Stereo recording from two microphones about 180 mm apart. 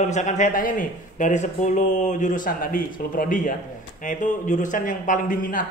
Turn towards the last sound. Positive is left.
turn(degrees=45)  # may be behind; listen again after turning